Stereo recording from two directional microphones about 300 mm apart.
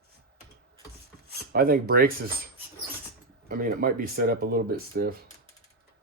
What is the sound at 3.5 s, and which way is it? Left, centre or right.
Speech, right.